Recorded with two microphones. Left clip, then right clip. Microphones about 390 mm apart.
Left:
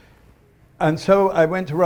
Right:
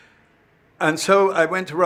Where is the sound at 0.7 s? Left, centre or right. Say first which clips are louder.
Even; left.